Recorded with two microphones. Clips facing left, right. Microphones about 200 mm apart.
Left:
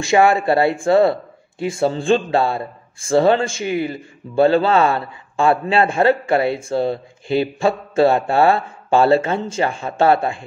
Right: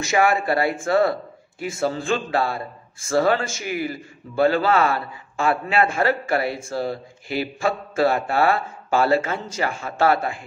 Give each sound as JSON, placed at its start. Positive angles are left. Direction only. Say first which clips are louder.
{"t": 0.0, "sound": "speech", "louder": "left 5 dB", "side_deg": 30}